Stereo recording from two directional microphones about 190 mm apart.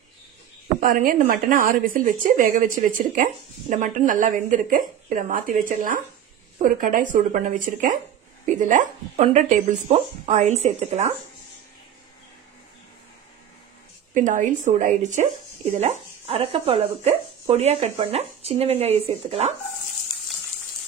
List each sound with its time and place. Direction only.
0.7 s a woman's voice: 45° right (ahead or behind)
14.1 s speech: 40° right (ahead or behind)